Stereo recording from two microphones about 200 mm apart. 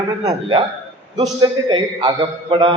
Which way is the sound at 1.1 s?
20° right (ahead or behind).